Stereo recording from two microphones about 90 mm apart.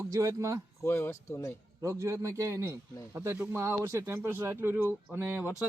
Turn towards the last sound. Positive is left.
turn(degrees=-20)  # may be behind; listen again after turning